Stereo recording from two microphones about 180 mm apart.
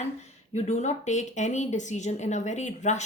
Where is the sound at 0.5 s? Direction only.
40° left (ahead or behind).